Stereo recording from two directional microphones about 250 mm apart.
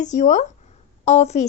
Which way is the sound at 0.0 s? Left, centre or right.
Left.